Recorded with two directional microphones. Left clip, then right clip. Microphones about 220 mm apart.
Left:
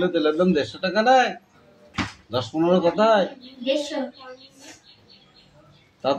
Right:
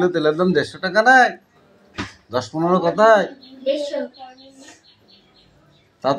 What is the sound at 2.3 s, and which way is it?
Speech, 35° right (ahead or behind).